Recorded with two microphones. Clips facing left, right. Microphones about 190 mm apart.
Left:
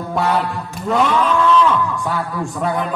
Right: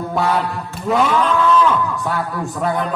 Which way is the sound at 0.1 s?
Centre (ahead or behind).